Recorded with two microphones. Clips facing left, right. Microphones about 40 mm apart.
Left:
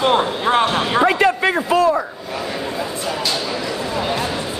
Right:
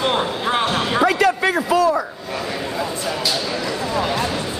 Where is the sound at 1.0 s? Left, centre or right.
Left.